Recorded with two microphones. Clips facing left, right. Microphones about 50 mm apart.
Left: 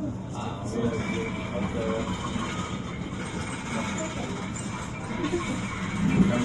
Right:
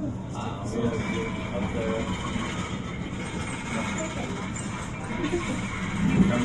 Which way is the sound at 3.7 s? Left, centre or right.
Right.